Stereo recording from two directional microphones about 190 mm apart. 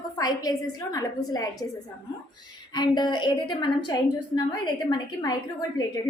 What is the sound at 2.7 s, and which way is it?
A woman's voice, 20° left (ahead or behind).